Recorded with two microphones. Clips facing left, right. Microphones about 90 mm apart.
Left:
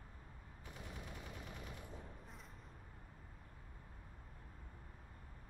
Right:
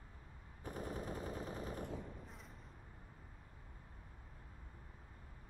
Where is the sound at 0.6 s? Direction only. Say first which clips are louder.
Right 9 dB; 40° right (ahead or behind).